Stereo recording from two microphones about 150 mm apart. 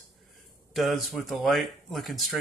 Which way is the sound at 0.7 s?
Centre (ahead or behind).